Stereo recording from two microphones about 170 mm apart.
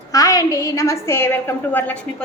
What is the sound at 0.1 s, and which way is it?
A woman's voice, 20° left (ahead or behind).